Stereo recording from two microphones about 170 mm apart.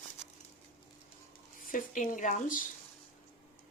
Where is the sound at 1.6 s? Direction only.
50° left (ahead or behind).